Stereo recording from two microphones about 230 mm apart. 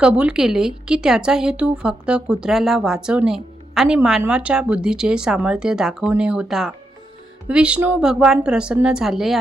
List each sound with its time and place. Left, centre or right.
0.0 s speech: centre